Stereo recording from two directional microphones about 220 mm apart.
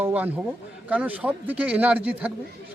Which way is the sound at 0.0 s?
5° right (ahead or behind).